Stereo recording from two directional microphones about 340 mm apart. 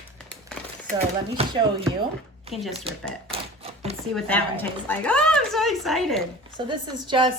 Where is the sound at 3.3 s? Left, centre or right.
Centre.